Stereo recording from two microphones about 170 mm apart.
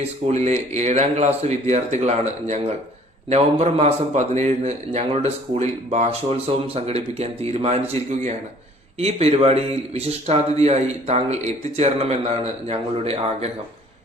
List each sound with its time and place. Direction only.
0.3 s a man's voice: 40° right (ahead or behind)